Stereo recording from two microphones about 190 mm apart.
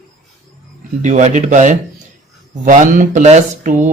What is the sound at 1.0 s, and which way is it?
Speech, 40° right (ahead or behind).